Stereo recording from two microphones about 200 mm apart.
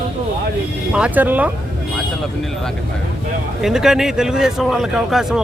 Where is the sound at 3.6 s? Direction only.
Centre (ahead or behind).